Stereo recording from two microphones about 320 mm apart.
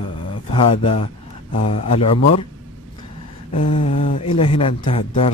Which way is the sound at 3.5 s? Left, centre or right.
Centre.